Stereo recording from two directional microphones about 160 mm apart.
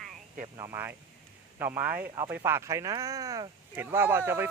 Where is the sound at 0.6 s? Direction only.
15° right (ahead or behind).